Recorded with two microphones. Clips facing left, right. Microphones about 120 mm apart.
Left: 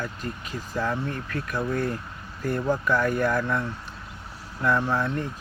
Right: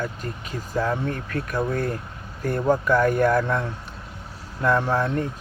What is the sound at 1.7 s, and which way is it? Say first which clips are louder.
Speech: right 1 dB; 45° right (ahead or behind).